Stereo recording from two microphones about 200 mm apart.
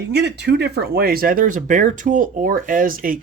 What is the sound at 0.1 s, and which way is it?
Speech, 55° right (ahead or behind).